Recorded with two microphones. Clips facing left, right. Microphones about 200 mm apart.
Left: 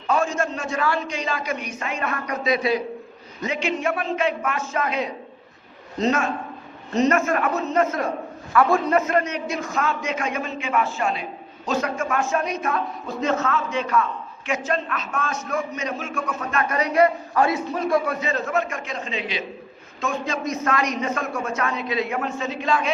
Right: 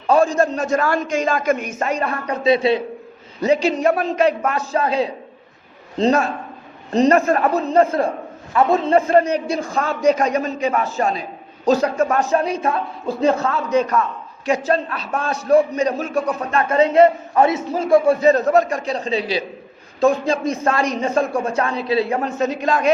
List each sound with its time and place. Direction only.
0.1 s a man's voice: 35° right (ahead or behind)